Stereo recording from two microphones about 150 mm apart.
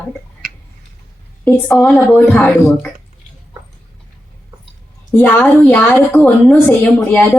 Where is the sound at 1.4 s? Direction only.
10° left (ahead or behind).